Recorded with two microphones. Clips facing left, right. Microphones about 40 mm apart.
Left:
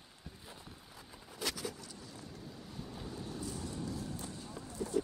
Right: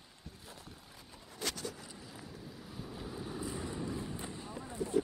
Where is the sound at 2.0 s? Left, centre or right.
Centre.